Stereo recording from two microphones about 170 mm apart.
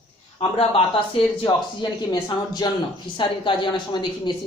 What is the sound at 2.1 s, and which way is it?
A woman's voice, 25° left (ahead or behind).